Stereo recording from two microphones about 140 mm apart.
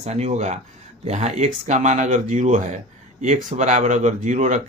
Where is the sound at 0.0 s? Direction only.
50° right (ahead or behind).